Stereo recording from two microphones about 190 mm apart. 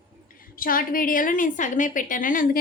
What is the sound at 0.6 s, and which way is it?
A woman's voice, 50° left (ahead or behind).